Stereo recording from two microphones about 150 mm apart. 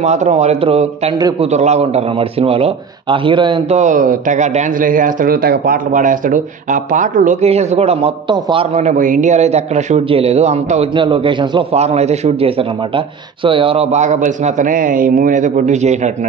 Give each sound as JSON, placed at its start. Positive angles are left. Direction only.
{"t": 0.0, "sound": "a man's voice", "side_deg": -50}
{"t": 3.6, "sound": "a man's voice", "side_deg": -55}
{"t": 7.4, "sound": "a man's voice", "side_deg": -45}
{"t": 8.7, "sound": "a man's voice", "side_deg": -55}
{"t": 11.0, "sound": "a man's voice", "side_deg": -35}
{"t": 11.7, "sound": "a man's voice", "side_deg": -45}